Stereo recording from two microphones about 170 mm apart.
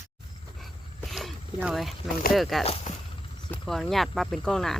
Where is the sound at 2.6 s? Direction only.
35° left (ahead or behind).